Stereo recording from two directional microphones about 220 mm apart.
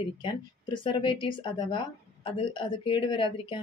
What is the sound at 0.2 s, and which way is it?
Speech, 20° left (ahead or behind).